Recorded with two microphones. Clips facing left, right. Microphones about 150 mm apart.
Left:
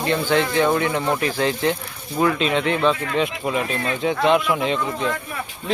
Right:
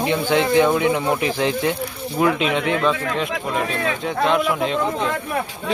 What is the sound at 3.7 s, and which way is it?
Speech, 90° right.